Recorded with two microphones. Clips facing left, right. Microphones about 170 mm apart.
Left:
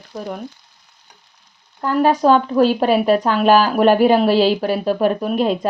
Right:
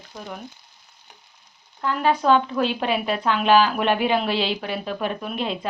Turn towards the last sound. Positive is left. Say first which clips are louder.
# left 9 dB
turn(degrees=40)  # may be behind; listen again after turning